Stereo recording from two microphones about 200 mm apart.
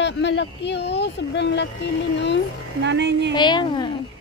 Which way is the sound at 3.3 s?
20° left (ahead or behind).